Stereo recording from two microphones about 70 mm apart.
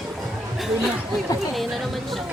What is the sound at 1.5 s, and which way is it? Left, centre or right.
Speech, centre.